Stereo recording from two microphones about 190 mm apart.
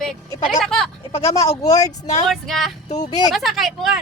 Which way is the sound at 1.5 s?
15° left (ahead or behind).